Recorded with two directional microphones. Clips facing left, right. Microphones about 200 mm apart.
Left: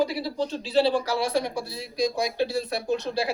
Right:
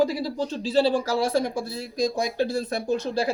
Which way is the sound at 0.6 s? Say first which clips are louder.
Right 1 dB; 45° right (ahead or behind).